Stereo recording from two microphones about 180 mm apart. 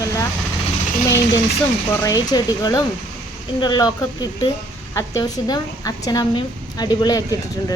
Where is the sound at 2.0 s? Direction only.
20° left (ahead or behind).